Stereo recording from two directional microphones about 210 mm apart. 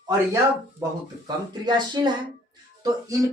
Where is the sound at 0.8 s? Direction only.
20° right (ahead or behind).